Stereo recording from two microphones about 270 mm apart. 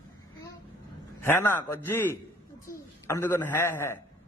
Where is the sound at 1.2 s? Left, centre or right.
Centre.